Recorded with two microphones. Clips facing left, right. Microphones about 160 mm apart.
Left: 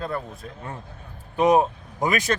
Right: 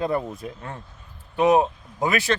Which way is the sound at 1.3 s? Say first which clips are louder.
Even; 5° right (ahead or behind).